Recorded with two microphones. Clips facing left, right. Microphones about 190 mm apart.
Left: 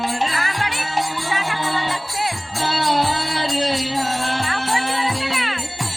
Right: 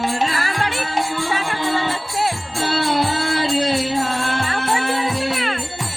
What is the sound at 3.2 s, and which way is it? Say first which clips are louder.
Music: right 3 dB; 50° right (ahead or behind).